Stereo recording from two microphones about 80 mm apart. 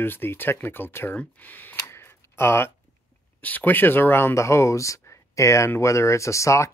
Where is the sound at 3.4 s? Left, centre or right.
Left.